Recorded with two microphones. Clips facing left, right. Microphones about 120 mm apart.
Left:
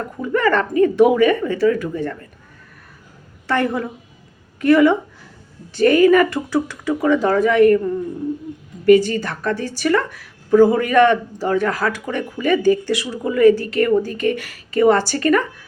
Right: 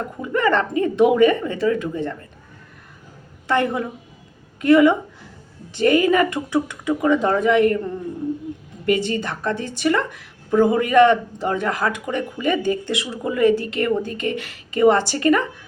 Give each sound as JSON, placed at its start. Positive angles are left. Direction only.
{"t": 0.2, "sound": "a woman's voice", "side_deg": -20}
{"t": 3.4, "sound": "a woman's voice", "side_deg": -20}
{"t": 8.9, "sound": "a woman's voice", "side_deg": -25}